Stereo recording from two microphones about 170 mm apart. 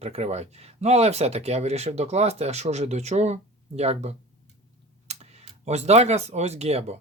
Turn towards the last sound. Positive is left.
turn(degrees=-40)  # may be behind; listen again after turning